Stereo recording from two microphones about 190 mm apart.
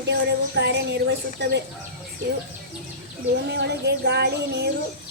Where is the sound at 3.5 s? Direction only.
65° right (ahead or behind).